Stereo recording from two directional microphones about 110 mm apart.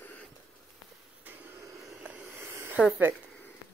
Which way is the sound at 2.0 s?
15° right (ahead or behind).